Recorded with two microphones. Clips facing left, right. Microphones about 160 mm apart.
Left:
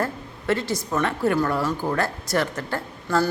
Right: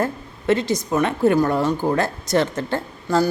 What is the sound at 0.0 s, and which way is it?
A woman's voice, 20° right (ahead or behind).